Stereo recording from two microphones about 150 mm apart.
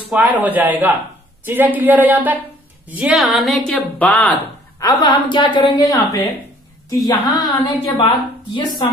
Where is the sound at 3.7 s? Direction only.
10° left (ahead or behind).